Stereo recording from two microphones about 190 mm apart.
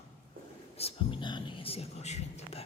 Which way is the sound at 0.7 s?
30° left (ahead or behind).